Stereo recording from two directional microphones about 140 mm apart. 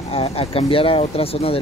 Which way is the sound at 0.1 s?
45° left (ahead or behind).